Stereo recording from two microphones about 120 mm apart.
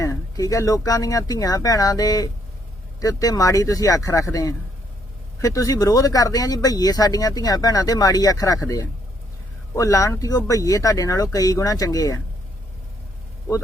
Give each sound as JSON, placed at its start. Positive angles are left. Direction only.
{"t": 0.0, "sound": "speech", "side_deg": 30}
{"t": 9.7, "sound": "speech", "side_deg": 25}